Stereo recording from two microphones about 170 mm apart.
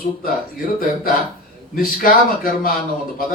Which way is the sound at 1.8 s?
60° left (ahead or behind).